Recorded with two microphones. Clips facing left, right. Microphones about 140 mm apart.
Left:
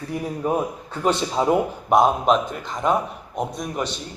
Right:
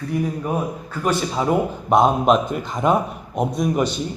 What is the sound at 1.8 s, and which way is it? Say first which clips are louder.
A man's voice: right 2 dB; 5° left (ahead or behind).